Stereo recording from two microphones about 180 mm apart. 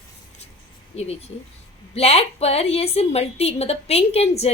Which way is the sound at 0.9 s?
35° left (ahead or behind).